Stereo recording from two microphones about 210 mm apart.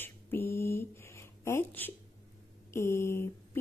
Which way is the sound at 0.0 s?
10° left (ahead or behind).